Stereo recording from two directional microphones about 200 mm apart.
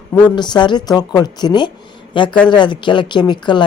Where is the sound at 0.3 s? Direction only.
20° left (ahead or behind).